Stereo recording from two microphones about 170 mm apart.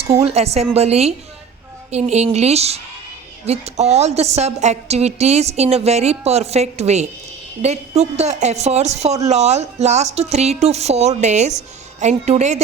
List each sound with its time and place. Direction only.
0.0 s a woman's voice: 35° right (ahead or behind)